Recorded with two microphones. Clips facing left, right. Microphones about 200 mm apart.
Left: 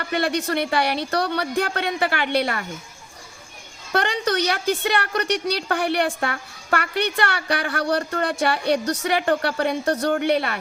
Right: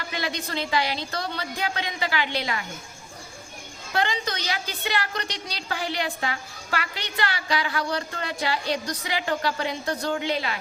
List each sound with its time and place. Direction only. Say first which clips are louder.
0.0 s a woman's voice: left 8 dB; 60° left (ahead or behind)
3.9 s a woman's voice: left 5 dB; 65° left (ahead or behind)